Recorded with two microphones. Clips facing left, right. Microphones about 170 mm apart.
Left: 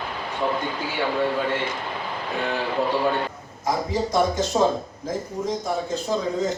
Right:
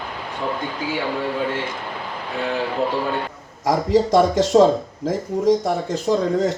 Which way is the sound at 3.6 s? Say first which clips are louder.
Right 7 dB; 90° right.